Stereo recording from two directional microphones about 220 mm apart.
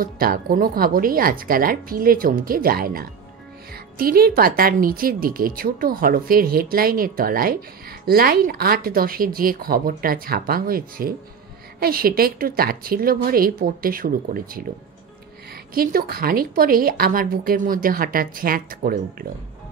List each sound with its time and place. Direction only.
0.0 s speech: 40° right (ahead or behind)
15.7 s speech: 40° right (ahead or behind)